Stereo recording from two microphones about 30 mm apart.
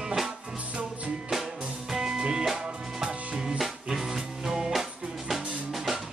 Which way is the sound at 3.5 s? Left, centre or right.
Centre.